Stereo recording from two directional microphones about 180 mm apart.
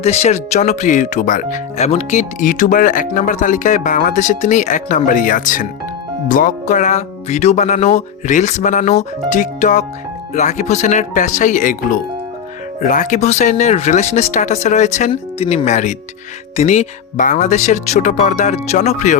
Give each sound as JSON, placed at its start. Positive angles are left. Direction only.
{"t": 0.0, "sound": "speech", "side_deg": 35}